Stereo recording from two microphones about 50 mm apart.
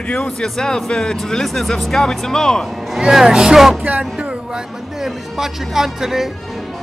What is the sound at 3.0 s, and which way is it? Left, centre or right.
Speech, centre.